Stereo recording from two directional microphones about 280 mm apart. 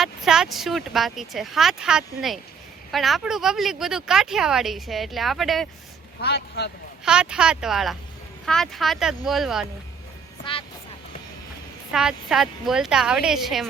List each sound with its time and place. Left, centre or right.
0.0 s speech: centre
6.2 s speech: left
7.0 s speech: centre
10.5 s speech: centre
11.9 s speech: centre